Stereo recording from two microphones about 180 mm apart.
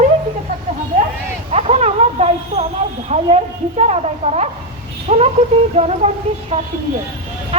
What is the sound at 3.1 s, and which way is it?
A woman's voice, 40° right (ahead or behind).